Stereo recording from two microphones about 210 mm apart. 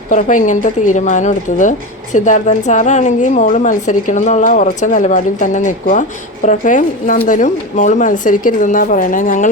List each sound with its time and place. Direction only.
0.1 s a woman's voice: 35° left (ahead or behind)